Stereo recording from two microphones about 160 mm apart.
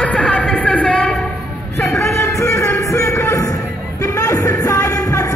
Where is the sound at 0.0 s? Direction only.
10° left (ahead or behind).